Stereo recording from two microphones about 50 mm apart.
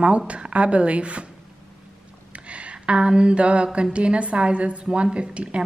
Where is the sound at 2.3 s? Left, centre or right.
Right.